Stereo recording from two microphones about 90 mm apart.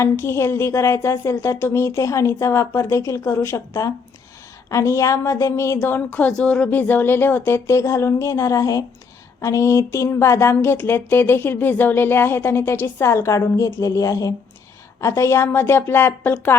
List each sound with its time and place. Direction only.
0.0 s speech: 30° left (ahead or behind)